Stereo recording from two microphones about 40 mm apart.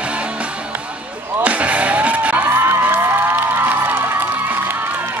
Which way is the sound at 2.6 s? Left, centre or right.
Right.